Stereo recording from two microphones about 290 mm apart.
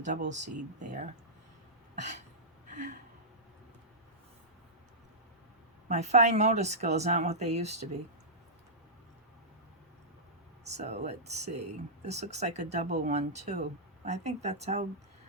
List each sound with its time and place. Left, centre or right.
0.0 s speech: right
2.6 s a sound: right
5.9 s speech: right
10.6 s speech: right